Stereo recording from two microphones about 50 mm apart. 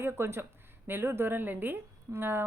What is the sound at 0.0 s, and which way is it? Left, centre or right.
A woman's voice, right.